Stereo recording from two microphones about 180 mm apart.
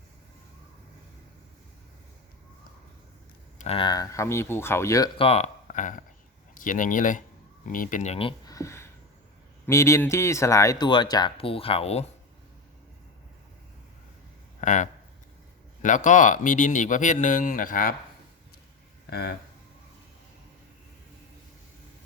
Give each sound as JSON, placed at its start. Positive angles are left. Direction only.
{"t": 3.6, "sound": "speech", "side_deg": 30}
{"t": 5.1, "sound": "speech", "side_deg": 35}
{"t": 8.4, "sound": "a sound", "side_deg": 15}
{"t": 9.6, "sound": "speech", "side_deg": 15}
{"t": 14.6, "sound": "speech", "side_deg": 45}